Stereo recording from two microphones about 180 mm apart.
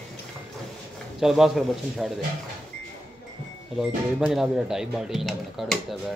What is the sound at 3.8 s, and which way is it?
Speech, centre (ahead or behind).